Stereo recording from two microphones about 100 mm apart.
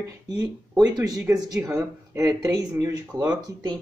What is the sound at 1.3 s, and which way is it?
Speech, 40° right (ahead or behind).